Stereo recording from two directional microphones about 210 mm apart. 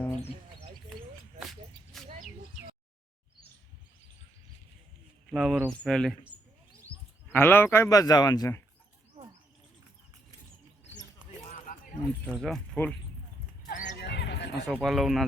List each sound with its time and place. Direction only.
1.4 s a sound: centre (ahead or behind)
5.3 s speech: 5° right (ahead or behind)
7.3 s speech: 10° left (ahead or behind)
12.2 s speech: centre (ahead or behind)
13.7 s horse: 40° left (ahead or behind)
14.0 s a sound: 55° left (ahead or behind)
14.7 s speech: centre (ahead or behind)